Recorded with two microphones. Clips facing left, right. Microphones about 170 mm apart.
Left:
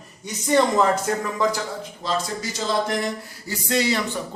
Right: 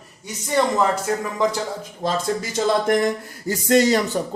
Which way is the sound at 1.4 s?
20° right (ahead or behind).